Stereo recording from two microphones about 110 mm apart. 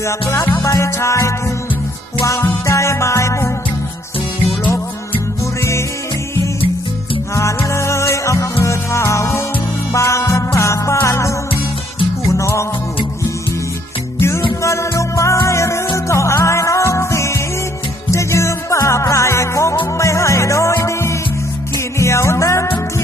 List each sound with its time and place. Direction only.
0.0 s music: 25° left (ahead or behind)
5.4 s music: 25° left (ahead or behind)
7.3 s music: 25° left (ahead or behind)
14.2 s music: 25° left (ahead or behind)